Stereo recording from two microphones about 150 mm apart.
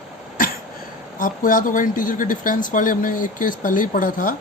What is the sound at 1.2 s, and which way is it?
Speech, 65° left (ahead or behind).